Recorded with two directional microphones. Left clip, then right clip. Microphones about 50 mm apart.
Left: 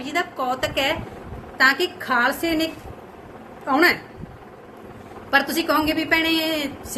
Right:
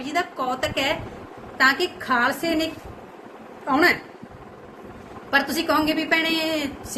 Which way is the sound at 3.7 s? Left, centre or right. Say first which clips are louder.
Left 1 dB; left.